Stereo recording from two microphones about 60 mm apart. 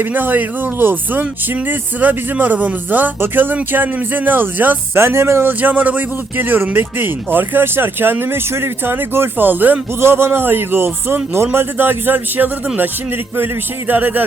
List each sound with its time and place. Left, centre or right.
0.0 s a man's voice: right
4.9 s a man's voice: right
10.0 s a man's voice: right